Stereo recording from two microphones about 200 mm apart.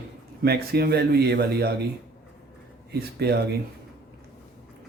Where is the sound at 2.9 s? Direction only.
55° right (ahead or behind).